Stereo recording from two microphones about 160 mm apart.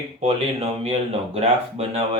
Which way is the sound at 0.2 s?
40° right (ahead or behind).